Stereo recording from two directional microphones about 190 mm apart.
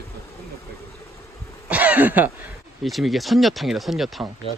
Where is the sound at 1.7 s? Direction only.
10° right (ahead or behind).